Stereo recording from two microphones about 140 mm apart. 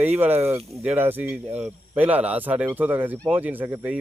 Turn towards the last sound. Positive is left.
turn(degrees=-10)  # may be behind; listen again after turning